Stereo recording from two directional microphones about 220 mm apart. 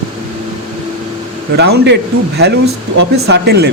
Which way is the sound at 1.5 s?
50° right (ahead or behind).